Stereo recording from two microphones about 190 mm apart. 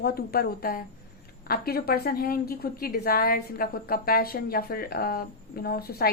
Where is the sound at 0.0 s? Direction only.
55° left (ahead or behind).